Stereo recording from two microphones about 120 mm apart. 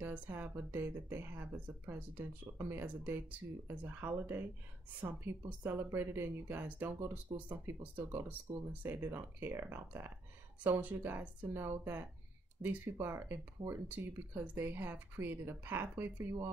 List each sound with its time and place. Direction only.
0.0 s speech: 15° right (ahead or behind)